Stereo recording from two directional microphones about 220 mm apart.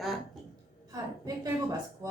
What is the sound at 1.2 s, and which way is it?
Speech, 15° right (ahead or behind).